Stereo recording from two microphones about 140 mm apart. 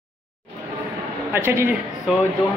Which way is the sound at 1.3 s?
15° right (ahead or behind).